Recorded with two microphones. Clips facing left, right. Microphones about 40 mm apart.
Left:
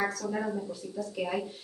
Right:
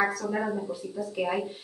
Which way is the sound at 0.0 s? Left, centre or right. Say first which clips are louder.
Right 4 dB; centre.